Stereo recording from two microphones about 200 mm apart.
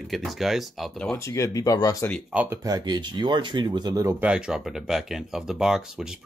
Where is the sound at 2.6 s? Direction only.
20° right (ahead or behind); by 6.2 s 5° right (ahead or behind).